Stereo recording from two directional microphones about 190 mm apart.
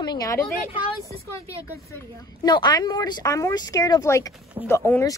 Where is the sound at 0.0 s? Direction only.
20° left (ahead or behind).